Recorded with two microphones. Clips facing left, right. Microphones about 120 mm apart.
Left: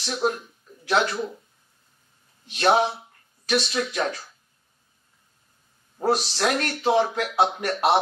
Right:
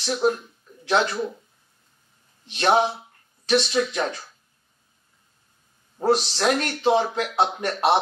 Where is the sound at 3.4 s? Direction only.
25° right (ahead or behind).